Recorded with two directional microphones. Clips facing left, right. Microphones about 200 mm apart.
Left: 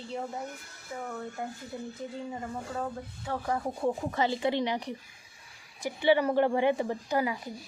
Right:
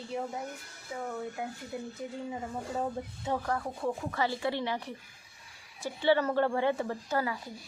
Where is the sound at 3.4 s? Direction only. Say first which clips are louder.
Left 3 dB; 20° left (ahead or behind).